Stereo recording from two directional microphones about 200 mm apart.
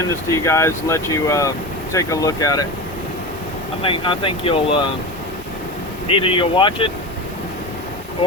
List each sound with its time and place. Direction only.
0.4 s speech: 15° left (ahead or behind)
3.8 s speech: 25° left (ahead or behind)
6.1 s speech: 25° left (ahead or behind)